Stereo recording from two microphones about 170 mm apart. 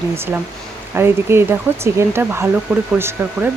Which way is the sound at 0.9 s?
15° right (ahead or behind).